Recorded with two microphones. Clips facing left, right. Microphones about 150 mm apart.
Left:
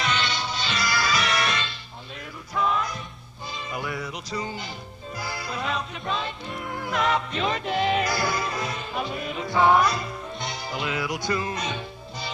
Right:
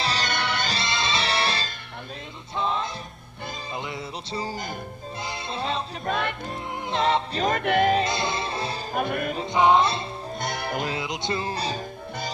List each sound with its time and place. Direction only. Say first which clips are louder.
0.0 s music: left 1 dB; 35° right (ahead or behind)
0.3 s music: right 3 dB; 60° right (ahead or behind)
0.7 s music: left 1 dB; 25° right (ahead or behind)
6.0 s music: right 4 dB; 60° right (ahead or behind)
6.9 s music: right 2 dB; 30° right (ahead or behind)
7.4 s music: right 5 dB; 55° right (ahead or behind)
8.0 s music: even; 25° right (ahead or behind)
8.9 s music: right 6 dB; 55° right (ahead or behind)
9.5 s music: even; 20° right (ahead or behind)
10.4 s music: right 4 dB; 55° right (ahead or behind)
11.0 s music: left 1 dB; 25° right (ahead or behind)